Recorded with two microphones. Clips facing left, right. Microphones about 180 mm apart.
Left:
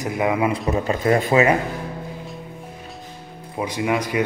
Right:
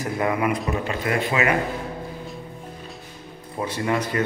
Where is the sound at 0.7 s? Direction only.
35° left (ahead or behind).